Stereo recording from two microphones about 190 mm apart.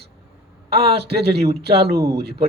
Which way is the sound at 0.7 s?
55° right (ahead or behind).